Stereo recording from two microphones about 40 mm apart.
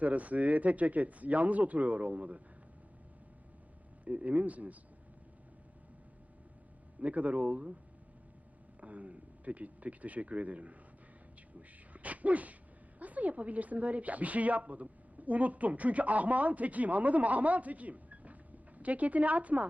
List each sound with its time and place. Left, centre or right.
0.0 s a woman's voice: right
4.0 s a woman's voice: right
7.0 s a woman's voice: right
8.8 s speech: right
11.9 s a woman's voice: right